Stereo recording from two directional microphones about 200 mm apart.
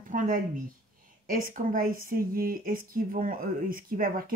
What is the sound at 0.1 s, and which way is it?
A woman's voice, 40° right (ahead or behind).